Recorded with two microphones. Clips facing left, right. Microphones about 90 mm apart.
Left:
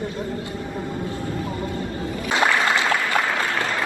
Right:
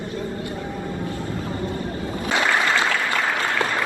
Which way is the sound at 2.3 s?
25° left (ahead or behind).